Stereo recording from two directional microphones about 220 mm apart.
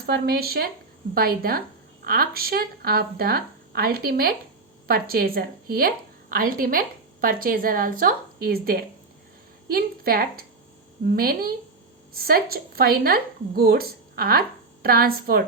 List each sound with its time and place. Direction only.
0.0 s a woman's voice: 45° right (ahead or behind)